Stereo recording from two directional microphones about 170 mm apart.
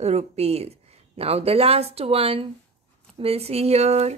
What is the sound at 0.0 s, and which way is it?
Speech, 40° right (ahead or behind).